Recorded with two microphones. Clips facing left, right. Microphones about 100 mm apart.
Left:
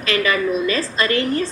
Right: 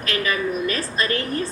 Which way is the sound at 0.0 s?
90° left.